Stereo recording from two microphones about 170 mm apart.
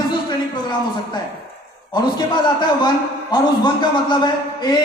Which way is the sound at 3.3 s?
25° left (ahead or behind).